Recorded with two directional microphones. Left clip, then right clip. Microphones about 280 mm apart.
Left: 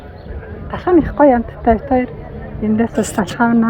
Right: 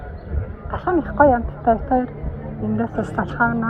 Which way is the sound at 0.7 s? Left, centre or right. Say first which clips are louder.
Left 7 dB; left.